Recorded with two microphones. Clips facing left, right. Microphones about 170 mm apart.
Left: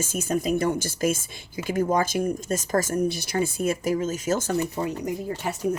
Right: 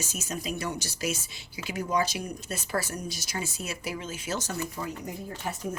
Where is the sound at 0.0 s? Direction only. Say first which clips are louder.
Left 9 dB; 50° left (ahead or behind).